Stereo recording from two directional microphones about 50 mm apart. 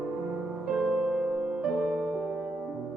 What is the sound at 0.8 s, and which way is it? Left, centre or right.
Music, centre.